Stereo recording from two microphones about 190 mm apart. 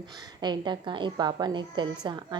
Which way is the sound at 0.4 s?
25° right (ahead or behind).